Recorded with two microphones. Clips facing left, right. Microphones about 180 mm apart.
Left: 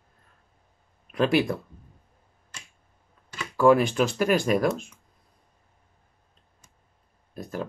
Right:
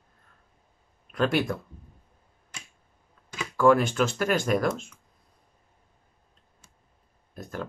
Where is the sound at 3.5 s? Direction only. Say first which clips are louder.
Left 2 dB; 15° left (ahead or behind).